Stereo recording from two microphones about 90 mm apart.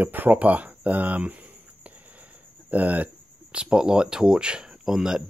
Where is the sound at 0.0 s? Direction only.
20° right (ahead or behind).